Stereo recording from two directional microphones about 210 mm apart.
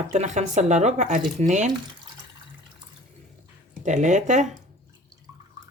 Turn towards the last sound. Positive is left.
turn(degrees=-35)  # may be behind; listen again after turning